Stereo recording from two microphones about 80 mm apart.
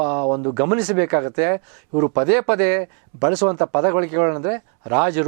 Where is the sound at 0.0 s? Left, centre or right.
Right.